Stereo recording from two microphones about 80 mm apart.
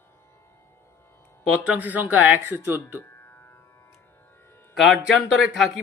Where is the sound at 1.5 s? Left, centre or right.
Centre.